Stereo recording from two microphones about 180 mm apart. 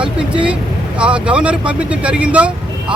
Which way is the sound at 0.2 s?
5° right (ahead or behind).